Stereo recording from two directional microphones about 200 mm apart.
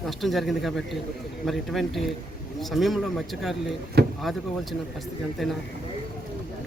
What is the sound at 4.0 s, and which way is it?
Door, 55° right (ahead or behind).